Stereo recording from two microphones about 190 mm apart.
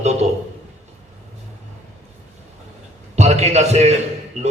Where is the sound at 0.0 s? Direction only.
35° right (ahead or behind).